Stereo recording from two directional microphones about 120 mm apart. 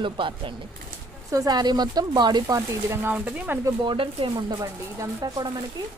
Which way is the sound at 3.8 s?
45° right (ahead or behind).